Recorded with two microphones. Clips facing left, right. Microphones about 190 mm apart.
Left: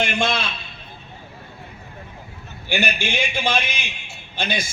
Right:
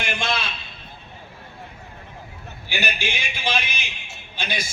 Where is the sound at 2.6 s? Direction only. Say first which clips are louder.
Left 4 dB; 55° left (ahead or behind).